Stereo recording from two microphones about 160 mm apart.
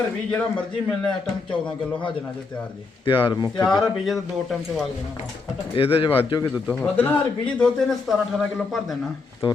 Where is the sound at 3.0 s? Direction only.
30° left (ahead or behind).